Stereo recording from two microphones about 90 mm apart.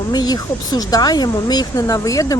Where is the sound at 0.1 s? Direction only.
45° left (ahead or behind).